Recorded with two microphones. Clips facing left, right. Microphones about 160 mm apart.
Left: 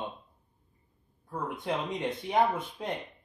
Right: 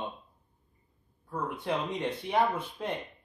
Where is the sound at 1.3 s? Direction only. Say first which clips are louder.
Right 1 dB; 15° left (ahead or behind).